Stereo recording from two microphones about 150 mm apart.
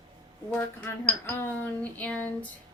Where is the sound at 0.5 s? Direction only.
10° left (ahead or behind).